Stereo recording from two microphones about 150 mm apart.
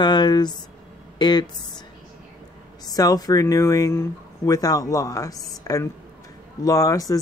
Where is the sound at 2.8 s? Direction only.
25° left (ahead or behind).